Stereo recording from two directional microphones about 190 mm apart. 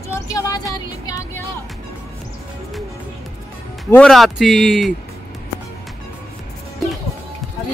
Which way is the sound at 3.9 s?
Centre (ahead or behind).